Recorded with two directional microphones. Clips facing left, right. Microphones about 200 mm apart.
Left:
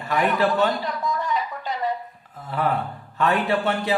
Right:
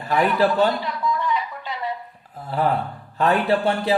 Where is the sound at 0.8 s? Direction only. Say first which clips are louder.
Right 2 dB; 45° left (ahead or behind).